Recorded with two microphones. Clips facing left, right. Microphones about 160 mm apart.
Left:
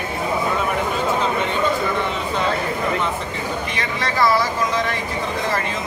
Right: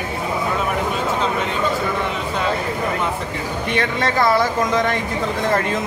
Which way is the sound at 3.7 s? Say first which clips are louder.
Right 5 dB; 55° right (ahead or behind).